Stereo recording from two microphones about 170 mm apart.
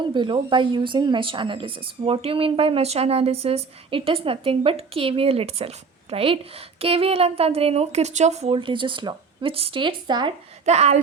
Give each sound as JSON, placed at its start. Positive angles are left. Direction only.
{"t": 0.0, "sound": "a woman's voice", "side_deg": -30}
{"t": 10.7, "sound": "a woman's voice", "side_deg": -40}